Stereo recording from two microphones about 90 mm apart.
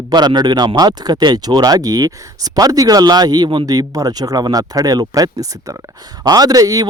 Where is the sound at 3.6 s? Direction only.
45° right (ahead or behind).